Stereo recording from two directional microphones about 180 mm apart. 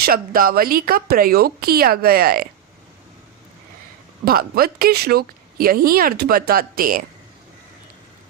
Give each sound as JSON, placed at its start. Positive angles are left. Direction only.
{"t": 0.0, "sound": "a woman's voice", "side_deg": -55}
{"t": 4.3, "sound": "a woman's voice", "side_deg": -55}